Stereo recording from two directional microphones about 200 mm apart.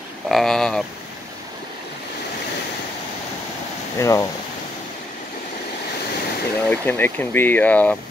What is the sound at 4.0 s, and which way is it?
Speech, 15° left (ahead or behind).